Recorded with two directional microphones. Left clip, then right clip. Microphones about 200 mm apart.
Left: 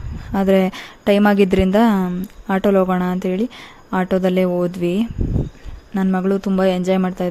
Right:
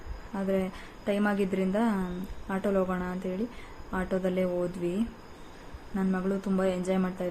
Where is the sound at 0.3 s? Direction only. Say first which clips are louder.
Left 14 dB; 55° left (ahead or behind).